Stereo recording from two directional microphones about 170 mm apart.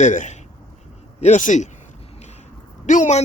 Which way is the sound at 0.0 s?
45° left (ahead or behind).